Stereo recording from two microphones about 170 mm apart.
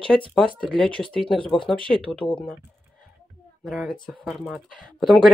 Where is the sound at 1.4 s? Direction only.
30° left (ahead or behind).